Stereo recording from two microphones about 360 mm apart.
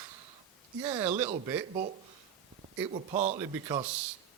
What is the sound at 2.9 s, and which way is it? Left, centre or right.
Speech, centre.